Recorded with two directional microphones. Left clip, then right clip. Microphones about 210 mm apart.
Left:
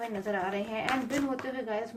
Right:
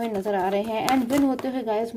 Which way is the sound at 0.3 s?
50° right (ahead or behind).